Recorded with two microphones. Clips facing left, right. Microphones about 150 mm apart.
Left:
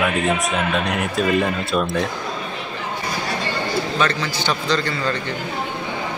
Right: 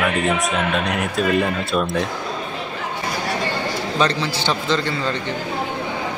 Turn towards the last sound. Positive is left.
turn(degrees=-20)  # may be behind; listen again after turning